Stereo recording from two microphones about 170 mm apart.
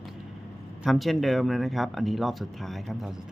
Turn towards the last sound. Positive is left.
turn(degrees=0)  # may be behind; listen again after turning